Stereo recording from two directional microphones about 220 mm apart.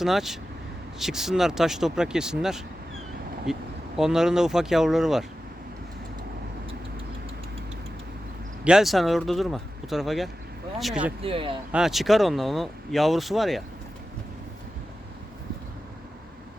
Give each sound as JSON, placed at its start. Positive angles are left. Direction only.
{"t": 0.0, "sound": "speech", "side_deg": 0}
{"t": 8.6, "sound": "speech", "side_deg": 0}
{"t": 11.2, "sound": "speech", "side_deg": -25}
{"t": 11.7, "sound": "speech", "side_deg": 0}